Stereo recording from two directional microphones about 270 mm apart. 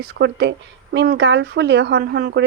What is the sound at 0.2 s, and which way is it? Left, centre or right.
A woman's voice, right.